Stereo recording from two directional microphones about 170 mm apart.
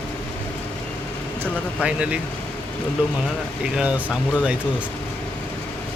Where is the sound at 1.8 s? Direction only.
5° right (ahead or behind).